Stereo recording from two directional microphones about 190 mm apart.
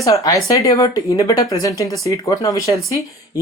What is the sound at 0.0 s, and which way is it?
Speech, 15° left (ahead or behind).